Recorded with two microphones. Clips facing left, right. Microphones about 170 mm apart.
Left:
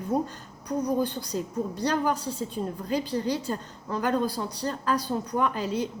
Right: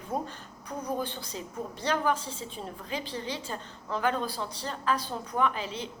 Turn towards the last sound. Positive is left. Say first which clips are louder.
# left 2 dB
turn(degrees=40)  # may be behind; listen again after turning